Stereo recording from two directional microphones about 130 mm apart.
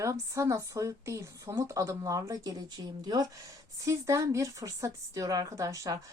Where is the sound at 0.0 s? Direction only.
25° right (ahead or behind).